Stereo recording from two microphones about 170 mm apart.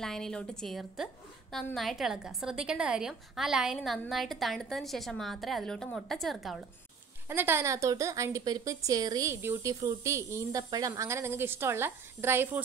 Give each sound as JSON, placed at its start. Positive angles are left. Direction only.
{"t": 0.0, "sound": "a woman's voice", "side_deg": 5}
{"t": 7.2, "sound": "a woman's voice", "side_deg": -15}